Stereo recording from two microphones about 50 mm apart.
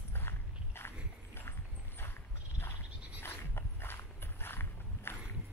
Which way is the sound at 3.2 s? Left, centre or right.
Left.